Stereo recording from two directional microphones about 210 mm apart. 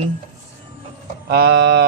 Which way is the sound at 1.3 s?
45° right (ahead or behind).